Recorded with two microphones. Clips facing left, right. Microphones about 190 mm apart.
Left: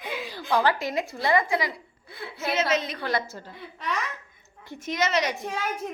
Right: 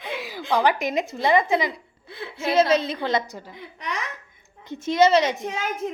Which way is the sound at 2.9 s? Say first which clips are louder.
Right 4 dB; 20° right (ahead or behind).